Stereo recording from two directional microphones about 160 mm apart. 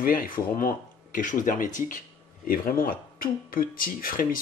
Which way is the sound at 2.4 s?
65° left (ahead or behind).